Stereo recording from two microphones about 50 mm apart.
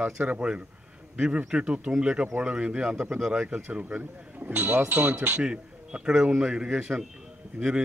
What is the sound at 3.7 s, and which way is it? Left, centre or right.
Speech, right.